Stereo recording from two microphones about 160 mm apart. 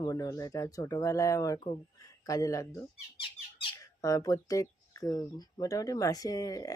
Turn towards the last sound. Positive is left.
turn(degrees=20)  # may be behind; listen again after turning